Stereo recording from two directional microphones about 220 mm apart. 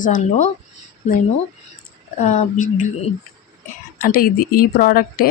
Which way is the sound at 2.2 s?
30° left (ahead or behind).